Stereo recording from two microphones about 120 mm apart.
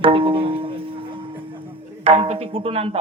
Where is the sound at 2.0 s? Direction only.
55° right (ahead or behind).